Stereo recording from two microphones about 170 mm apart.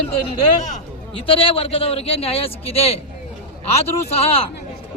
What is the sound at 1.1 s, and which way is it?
Speech, 30° left (ahead or behind).